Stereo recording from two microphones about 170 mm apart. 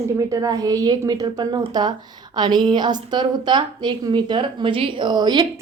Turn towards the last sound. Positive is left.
turn(degrees=-25)  # may be behind; listen again after turning